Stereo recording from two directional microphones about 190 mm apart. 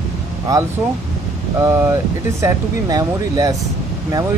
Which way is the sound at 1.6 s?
10° right (ahead or behind).